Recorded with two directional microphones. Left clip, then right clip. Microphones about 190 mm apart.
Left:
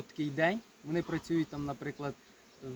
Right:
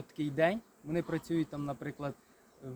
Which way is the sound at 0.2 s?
45° right (ahead or behind).